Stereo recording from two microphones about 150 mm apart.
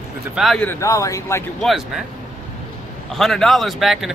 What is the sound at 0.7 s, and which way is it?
Speech, 20° left (ahead or behind).